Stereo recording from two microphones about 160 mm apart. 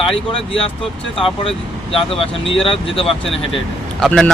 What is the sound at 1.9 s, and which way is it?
Speech, 35° left (ahead or behind).